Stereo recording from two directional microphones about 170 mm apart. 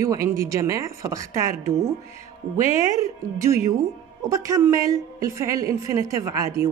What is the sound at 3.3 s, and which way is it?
A woman's voice, 15° right (ahead or behind).